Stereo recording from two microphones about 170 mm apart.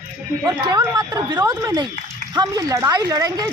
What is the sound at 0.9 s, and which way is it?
A woman's voice, 20° right (ahead or behind).